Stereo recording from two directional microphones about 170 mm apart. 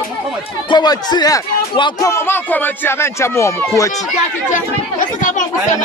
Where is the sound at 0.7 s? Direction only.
25° left (ahead or behind).